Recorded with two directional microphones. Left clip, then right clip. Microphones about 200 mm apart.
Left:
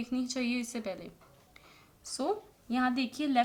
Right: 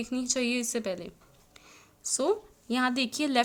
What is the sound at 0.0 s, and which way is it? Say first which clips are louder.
A woman's voice: right 4 dB; 40° right (ahead or behind).